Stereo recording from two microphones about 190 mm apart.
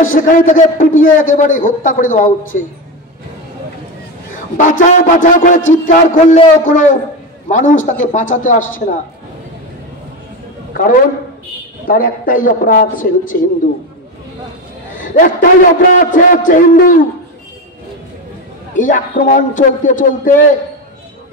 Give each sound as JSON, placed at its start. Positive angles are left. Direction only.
{"t": 0.0, "sound": "a man's voice", "side_deg": 45}
{"t": 4.6, "sound": "a man's voice", "side_deg": 40}
{"t": 10.8, "sound": "a man's voice", "side_deg": 50}
{"t": 15.0, "sound": "a sound", "side_deg": 45}
{"t": 16.0, "sound": "a man's voice", "side_deg": 45}
{"t": 18.8, "sound": "a man's voice", "side_deg": 45}